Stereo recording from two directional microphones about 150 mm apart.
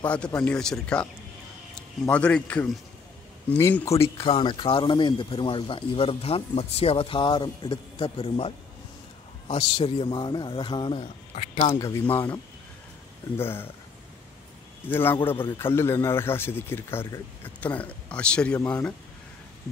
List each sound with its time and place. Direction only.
0.0 s a man's voice: 10° left (ahead or behind)
2.0 s a man's voice: 5° left (ahead or behind)
4.2 s speech: 35° left (ahead or behind)
11.7 s a man's voice: 15° left (ahead or behind)
13.4 s a man's voice: 15° left (ahead or behind)
14.9 s a man's voice: 15° left (ahead or behind)